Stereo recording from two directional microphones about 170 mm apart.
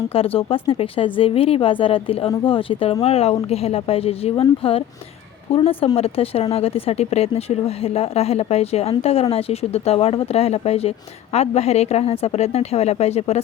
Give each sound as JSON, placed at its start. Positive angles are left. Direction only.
{"t": 0.1, "sound": "speech", "side_deg": 35}